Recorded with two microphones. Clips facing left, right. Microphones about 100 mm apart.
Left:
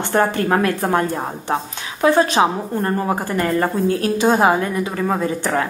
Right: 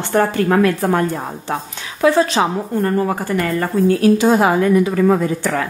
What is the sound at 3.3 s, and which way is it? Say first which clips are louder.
Speech: left 1 dB; 30° left (ahead or behind).